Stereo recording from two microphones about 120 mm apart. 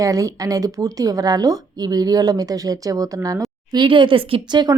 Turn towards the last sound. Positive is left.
turn(degrees=-40)  # may be behind; listen again after turning